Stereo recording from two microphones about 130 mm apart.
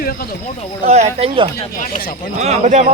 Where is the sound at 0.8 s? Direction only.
55° right (ahead or behind).